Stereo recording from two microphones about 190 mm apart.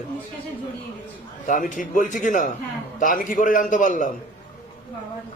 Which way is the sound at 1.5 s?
45° left (ahead or behind).